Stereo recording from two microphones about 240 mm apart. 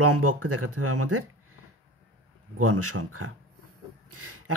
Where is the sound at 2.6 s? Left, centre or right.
Right.